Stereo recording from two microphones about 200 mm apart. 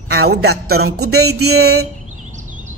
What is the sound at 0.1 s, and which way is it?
Speech, 55° right (ahead or behind).